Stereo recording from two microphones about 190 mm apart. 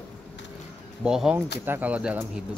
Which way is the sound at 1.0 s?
5° right (ahead or behind).